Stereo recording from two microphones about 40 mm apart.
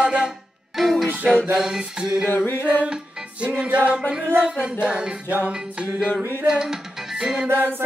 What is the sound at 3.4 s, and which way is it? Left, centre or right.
Music, right.